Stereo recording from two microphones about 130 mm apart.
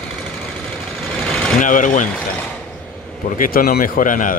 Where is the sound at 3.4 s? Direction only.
90° left.